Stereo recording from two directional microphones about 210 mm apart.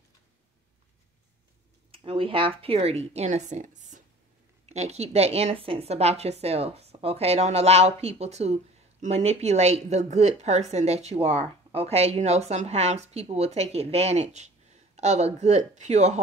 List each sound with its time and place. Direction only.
1.9 s a woman's voice: 25° right (ahead or behind)